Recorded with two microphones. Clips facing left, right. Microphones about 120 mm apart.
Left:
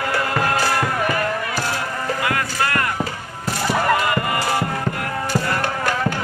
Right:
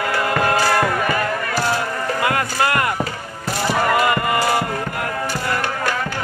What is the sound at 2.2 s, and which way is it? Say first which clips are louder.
Music: right 4 dB; 25° right (ahead or behind).